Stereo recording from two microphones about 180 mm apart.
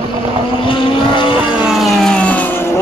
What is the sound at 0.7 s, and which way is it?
Vehicle, 30° left (ahead or behind).